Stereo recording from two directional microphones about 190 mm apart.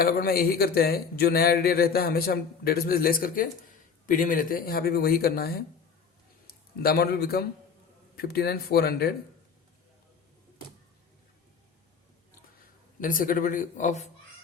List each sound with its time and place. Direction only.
0.0 s a man's voice: 55° left (ahead or behind)
13.0 s a man's voice: 45° left (ahead or behind)